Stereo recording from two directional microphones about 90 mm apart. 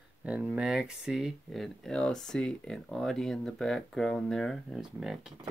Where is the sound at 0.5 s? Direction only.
10° right (ahead or behind).